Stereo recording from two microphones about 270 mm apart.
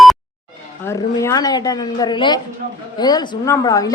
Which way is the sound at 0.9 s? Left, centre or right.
Centre.